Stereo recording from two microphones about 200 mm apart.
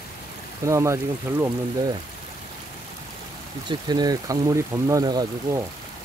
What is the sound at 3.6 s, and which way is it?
Speech, 20° right (ahead or behind).